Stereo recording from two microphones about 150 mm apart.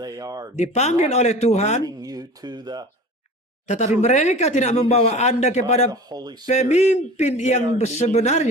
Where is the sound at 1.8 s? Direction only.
25° right (ahead or behind).